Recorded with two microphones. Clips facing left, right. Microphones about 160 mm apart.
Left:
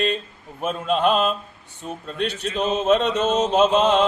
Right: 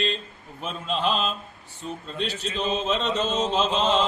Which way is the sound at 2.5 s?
55° left (ahead or behind).